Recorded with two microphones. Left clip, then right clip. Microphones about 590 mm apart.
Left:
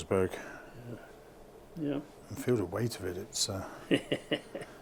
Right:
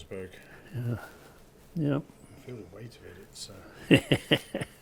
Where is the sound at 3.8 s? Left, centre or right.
Right.